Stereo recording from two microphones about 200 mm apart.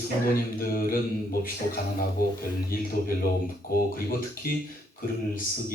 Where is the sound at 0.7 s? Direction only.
45° left (ahead or behind).